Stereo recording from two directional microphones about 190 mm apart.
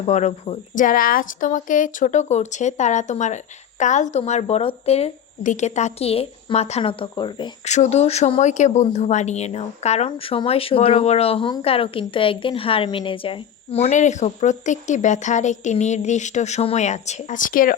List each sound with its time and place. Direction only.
0.0 s speech: 35° left (ahead or behind)
7.7 s speech: 35° left (ahead or behind)